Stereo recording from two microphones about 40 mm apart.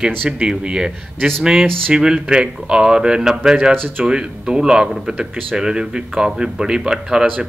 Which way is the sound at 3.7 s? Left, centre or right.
Right.